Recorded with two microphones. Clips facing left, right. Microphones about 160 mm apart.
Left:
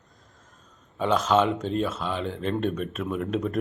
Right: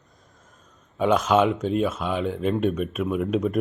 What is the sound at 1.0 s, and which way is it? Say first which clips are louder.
Speech: right 3 dB; 10° right (ahead or behind).